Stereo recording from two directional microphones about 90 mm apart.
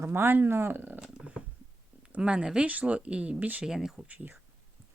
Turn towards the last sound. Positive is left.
turn(degrees=-5)  # may be behind; listen again after turning